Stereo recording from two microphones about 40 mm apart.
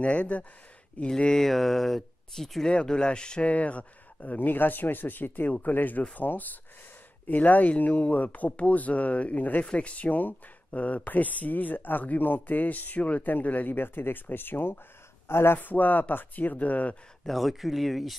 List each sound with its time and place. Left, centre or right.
0.0 s speech: left
1.0 s speech: centre
2.7 s speech: left
3.4 s speech: left
4.4 s speech: left
13.7 s speech: left
15.2 s speech: left
15.6 s speech: left
17.3 s speech: centre